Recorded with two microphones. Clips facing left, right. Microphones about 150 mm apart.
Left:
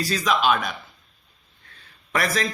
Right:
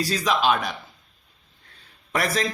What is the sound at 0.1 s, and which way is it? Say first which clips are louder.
Speech: left 2 dB; 30° right (ahead or behind).